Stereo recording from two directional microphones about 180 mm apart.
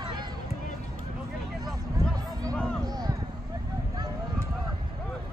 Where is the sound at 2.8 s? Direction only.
20° right (ahead or behind).